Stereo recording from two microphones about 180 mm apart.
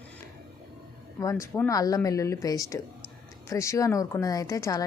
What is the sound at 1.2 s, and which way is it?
A woman's voice, 15° left (ahead or behind).